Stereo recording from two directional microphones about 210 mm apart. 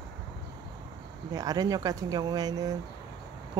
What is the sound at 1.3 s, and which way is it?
Speech, 15° right (ahead or behind).